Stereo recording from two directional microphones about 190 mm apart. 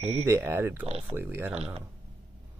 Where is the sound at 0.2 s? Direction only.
10° right (ahead or behind).